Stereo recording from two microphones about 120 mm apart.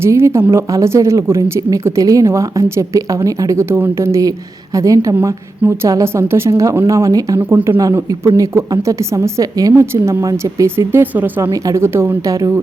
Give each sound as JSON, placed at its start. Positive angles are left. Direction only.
{"t": 0.0, "sound": "speech", "side_deg": -20}
{"t": 11.5, "sound": "speech", "side_deg": -25}